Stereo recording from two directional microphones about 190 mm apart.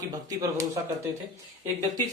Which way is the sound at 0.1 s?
20° right (ahead or behind).